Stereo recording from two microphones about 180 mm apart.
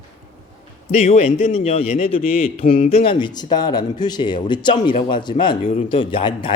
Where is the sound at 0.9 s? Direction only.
35° left (ahead or behind).